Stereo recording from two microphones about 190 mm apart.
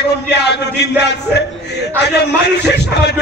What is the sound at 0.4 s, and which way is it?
A man's voice, 60° left (ahead or behind).